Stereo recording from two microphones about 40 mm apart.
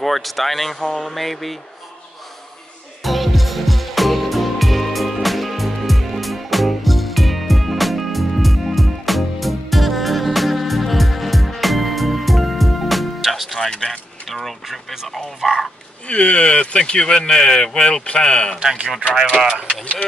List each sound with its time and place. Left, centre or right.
0.0 s speech: centre
3.0 s music: centre
13.7 s a sound: centre
15.0 s speech: centre
16.1 s speech: left